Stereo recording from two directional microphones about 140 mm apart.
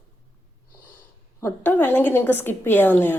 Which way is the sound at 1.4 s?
15° left (ahead or behind).